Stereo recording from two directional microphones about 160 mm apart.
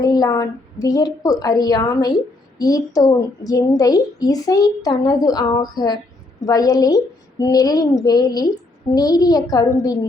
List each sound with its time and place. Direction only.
0.0 s a woman's voice: 20° left (ahead or behind)